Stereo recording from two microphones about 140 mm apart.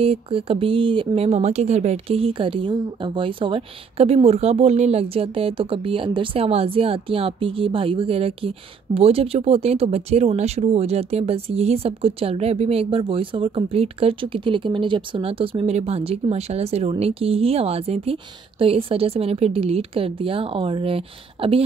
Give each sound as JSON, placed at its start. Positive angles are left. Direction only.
{"t": 0.0, "sound": "speech", "side_deg": -45}